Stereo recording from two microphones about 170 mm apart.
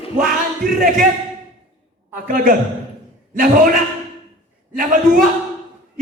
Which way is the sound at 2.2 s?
55° right (ahead or behind).